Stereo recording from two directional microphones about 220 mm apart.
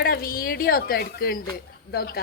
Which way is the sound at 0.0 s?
40° left (ahead or behind).